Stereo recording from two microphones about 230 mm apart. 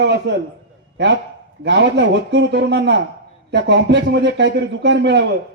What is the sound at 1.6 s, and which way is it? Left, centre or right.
A man's voice, right.